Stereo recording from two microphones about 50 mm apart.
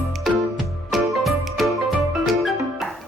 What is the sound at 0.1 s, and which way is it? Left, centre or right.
Music, centre.